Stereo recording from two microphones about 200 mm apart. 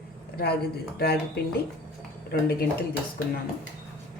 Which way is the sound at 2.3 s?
50° left (ahead or behind).